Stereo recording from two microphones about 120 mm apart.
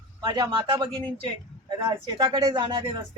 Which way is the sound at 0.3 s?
35° right (ahead or behind).